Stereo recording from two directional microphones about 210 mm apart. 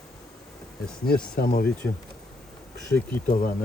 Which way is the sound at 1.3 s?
45° left (ahead or behind).